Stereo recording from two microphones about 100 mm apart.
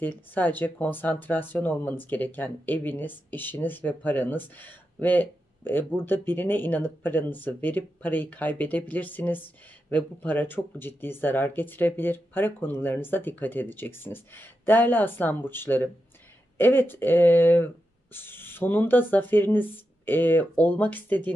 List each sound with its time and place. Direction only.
0.0 s speech: 20° left (ahead or behind)